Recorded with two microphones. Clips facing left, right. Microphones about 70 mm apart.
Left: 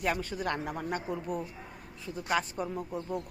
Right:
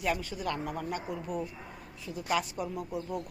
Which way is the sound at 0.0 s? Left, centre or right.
Left.